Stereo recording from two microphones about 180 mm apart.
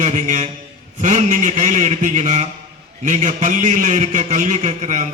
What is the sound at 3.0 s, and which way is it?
Music, 45° right (ahead or behind).